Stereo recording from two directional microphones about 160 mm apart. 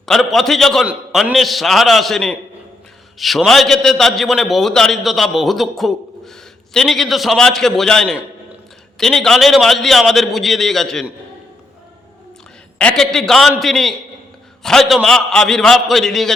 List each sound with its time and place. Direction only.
0.0 s a man's voice: centre (ahead or behind)
12.8 s a man's voice: 5° left (ahead or behind)